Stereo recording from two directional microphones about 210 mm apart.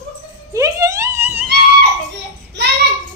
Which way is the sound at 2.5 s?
55° right (ahead or behind).